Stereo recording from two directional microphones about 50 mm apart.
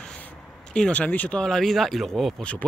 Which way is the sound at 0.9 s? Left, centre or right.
Left.